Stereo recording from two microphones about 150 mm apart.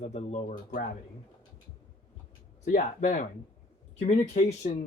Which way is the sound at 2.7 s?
65° left (ahead or behind).